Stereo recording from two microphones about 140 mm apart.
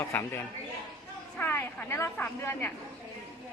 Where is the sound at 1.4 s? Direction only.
15° left (ahead or behind).